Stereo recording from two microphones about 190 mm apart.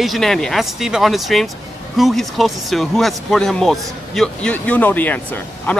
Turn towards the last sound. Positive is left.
turn(degrees=10)  # may be behind; listen again after turning